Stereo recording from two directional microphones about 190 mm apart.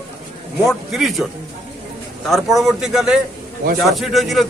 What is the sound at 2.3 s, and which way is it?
Speech, centre (ahead or behind).